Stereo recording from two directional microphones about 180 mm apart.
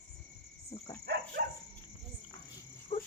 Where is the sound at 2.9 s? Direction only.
30° left (ahead or behind).